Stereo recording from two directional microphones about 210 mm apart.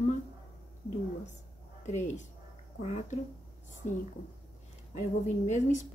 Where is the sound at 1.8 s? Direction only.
35° left (ahead or behind).